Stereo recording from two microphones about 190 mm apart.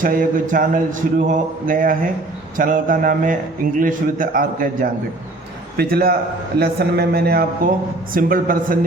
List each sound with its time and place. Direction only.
0.0 s speech: 45° right (ahead or behind)